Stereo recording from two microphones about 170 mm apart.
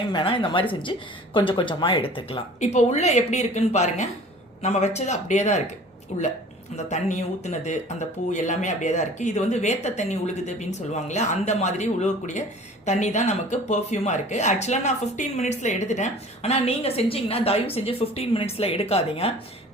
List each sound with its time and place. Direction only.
0.1 s speech: 30° left (ahead or behind)